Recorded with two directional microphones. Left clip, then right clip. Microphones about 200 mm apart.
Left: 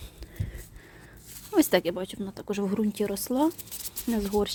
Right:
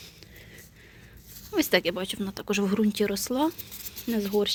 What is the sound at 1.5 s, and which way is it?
Speech, 30° left (ahead or behind).